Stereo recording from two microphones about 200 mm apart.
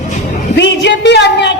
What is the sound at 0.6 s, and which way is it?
Speech, 60° left (ahead or behind).